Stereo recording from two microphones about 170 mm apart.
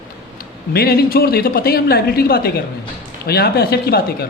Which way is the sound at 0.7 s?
65° left (ahead or behind).